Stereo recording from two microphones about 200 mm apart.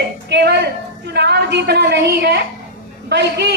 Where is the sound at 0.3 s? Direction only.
55° right (ahead or behind).